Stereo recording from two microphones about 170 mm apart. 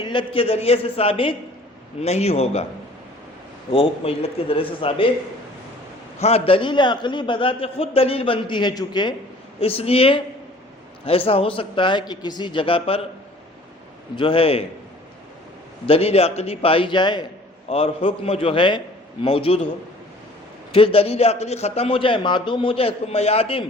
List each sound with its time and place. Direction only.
0.0 s a man's voice: 30° left (ahead or behind)
3.7 s a man's voice: 35° left (ahead or behind)
6.1 s a man's voice: 35° left (ahead or behind)
14.2 s a man's voice: 30° left (ahead or behind)
15.9 s a man's voice: 35° left (ahead or behind)
20.7 s a man's voice: 35° left (ahead or behind)